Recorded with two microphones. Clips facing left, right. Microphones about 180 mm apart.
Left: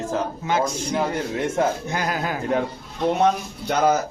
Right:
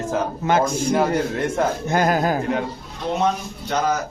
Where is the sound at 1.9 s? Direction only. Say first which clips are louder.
Right 7 dB; 50° right (ahead or behind).